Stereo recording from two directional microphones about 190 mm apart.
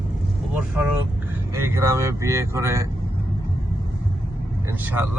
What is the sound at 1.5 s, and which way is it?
Speech, 15° right (ahead or behind).